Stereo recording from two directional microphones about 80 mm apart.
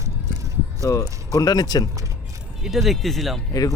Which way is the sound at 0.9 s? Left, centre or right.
Left.